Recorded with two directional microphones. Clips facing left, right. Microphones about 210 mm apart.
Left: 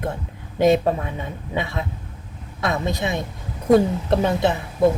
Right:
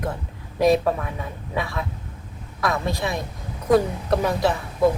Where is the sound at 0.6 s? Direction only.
25° left (ahead or behind).